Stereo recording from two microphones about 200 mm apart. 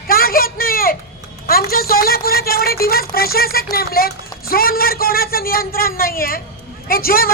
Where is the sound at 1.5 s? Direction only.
50° left (ahead or behind).